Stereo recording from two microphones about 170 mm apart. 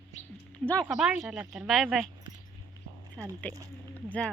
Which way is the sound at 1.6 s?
Centre (ahead or behind).